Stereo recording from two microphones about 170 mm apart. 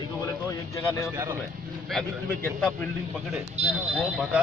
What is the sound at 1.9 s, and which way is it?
Speech, 5° left (ahead or behind).